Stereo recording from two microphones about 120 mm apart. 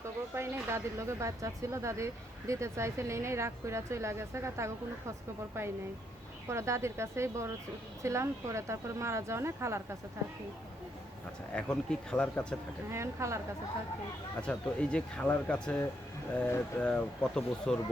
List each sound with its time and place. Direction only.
0.3 s speech: 25° right (ahead or behind)
6.5 s speech: 25° right (ahead or behind)
11.5 s speech: 5° left (ahead or behind)
12.9 s speech: 20° right (ahead or behind)
14.4 s speech: 10° left (ahead or behind)